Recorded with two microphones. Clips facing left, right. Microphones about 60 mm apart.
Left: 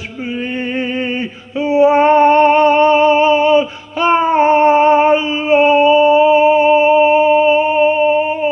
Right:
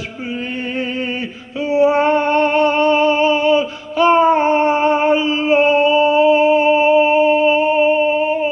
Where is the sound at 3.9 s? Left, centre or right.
Left.